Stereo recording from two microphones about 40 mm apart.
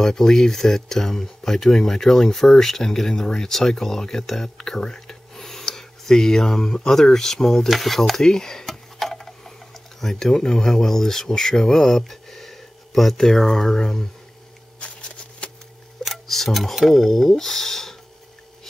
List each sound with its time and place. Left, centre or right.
0.0 s speech: centre
8.2 s a sound: centre
9.9 s speech: centre
14.8 s shuffling cards: left
16.0 s speech: centre